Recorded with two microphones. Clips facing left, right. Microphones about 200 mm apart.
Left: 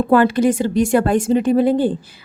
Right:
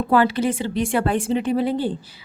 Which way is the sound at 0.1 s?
50° left (ahead or behind).